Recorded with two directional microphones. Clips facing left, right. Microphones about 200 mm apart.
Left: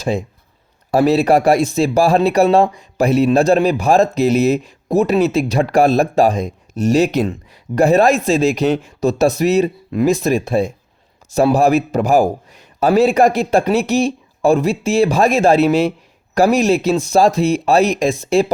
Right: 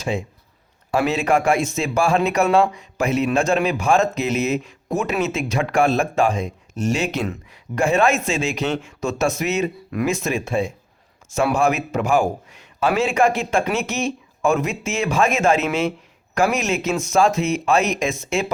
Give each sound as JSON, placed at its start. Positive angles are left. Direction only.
{"t": 0.0, "sound": "a man's voice", "side_deg": 35}